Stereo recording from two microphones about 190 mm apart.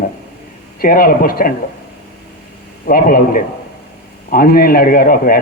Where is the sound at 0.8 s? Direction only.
50° left (ahead or behind).